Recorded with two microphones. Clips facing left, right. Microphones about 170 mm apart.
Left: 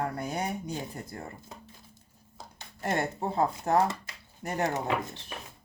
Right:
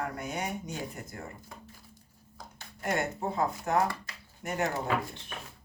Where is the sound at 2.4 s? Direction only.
25° left (ahead or behind).